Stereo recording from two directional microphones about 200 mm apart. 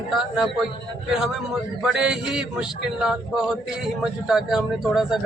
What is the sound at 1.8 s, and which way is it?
A man's voice, 5° right (ahead or behind).